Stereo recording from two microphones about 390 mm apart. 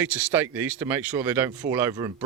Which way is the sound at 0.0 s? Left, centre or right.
Centre.